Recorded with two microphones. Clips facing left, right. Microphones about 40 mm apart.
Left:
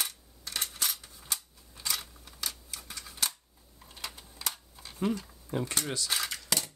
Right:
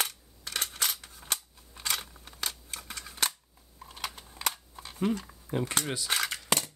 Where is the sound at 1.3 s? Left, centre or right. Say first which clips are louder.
Right 3 dB; right.